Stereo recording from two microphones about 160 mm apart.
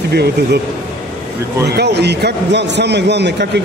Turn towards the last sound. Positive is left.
turn(degrees=-90)